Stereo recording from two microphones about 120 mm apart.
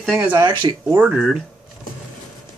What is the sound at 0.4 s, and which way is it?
Speech, 40° right (ahead or behind).